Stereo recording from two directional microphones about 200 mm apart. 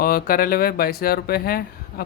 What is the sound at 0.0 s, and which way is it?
Speech, 45° left (ahead or behind).